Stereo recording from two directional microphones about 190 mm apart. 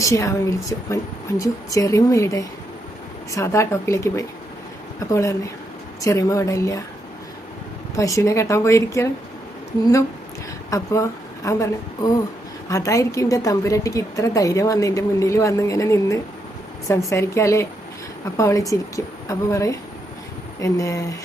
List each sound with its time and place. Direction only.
0.0 s a woman's voice: 15° left (ahead or behind)
7.9 s a woman's voice: 15° left (ahead or behind)
10.7 s a woman's voice: 15° left (ahead or behind)